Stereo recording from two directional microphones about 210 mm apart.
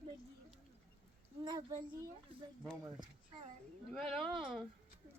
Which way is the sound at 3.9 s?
Centre (ahead or behind).